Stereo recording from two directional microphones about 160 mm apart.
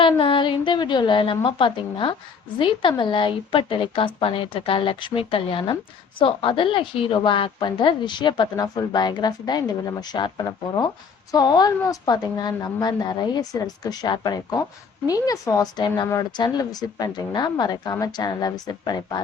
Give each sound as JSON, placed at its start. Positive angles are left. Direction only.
{"t": 0.0, "sound": "a woman's voice", "side_deg": 30}